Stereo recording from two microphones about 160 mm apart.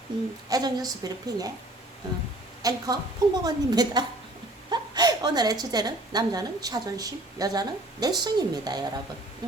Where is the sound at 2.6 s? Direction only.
25° right (ahead or behind).